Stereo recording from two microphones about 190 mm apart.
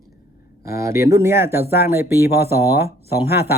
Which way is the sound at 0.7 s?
15° right (ahead or behind).